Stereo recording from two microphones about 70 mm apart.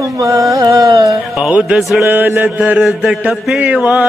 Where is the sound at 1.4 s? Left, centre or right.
Centre.